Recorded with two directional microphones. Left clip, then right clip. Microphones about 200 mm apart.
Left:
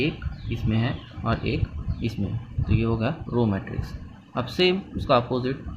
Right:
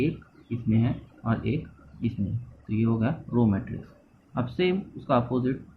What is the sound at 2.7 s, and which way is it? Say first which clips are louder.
Speech: left 2 dB; 40° left (ahead or behind).